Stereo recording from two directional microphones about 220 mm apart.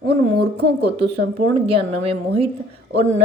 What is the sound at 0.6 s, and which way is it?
Speech, 50° right (ahead or behind).